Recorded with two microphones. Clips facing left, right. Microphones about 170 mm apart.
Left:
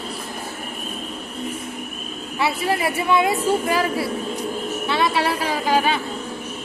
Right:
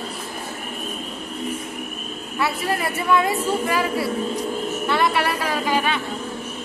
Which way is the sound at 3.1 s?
20° left (ahead or behind).